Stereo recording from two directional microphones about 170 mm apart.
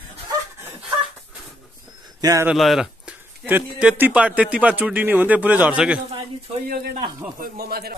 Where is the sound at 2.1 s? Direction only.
20° right (ahead or behind).